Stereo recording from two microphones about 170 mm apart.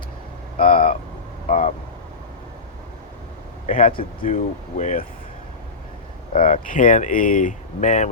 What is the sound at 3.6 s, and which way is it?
Speech, 50° left (ahead or behind).